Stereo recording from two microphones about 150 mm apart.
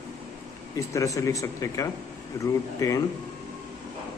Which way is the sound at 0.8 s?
20° left (ahead or behind).